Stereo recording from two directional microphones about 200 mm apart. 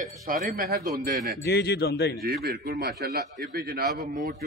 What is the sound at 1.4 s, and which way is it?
Speech, 55° left (ahead or behind).